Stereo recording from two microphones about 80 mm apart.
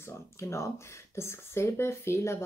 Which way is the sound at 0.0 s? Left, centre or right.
Left.